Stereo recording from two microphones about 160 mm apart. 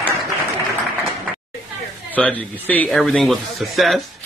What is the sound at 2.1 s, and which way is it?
A man's voice, 10° left (ahead or behind).